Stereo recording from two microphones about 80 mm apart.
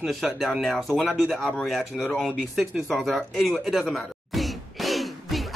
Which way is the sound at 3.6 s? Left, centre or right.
Centre.